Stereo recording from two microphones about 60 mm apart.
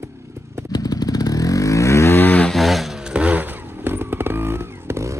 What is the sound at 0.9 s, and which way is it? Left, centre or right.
Motorcycle, left.